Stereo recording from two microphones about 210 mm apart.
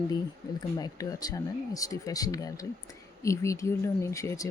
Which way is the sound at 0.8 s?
15° left (ahead or behind).